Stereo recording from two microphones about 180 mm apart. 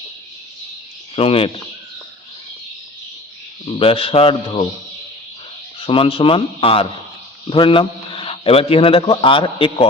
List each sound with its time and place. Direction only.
1.1 s a man's voice: 30° left (ahead or behind)
3.7 s a man's voice: 30° left (ahead or behind)
5.8 s a man's voice: 30° left (ahead or behind)